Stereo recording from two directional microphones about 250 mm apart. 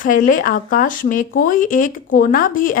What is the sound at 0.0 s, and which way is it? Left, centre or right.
Speech, left.